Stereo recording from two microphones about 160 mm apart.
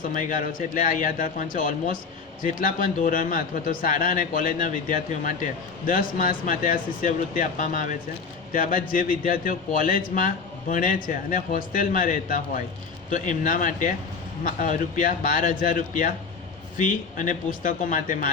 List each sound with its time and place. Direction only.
0.1 s a man's voice: 55° left (ahead or behind)